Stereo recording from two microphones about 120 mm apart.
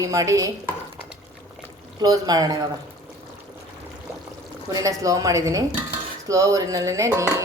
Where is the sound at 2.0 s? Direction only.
30° right (ahead or behind).